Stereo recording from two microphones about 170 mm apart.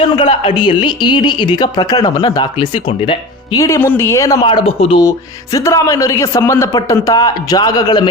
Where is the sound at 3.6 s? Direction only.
15° left (ahead or behind).